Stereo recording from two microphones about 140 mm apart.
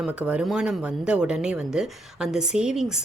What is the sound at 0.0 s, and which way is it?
Speech, 10° right (ahead or behind).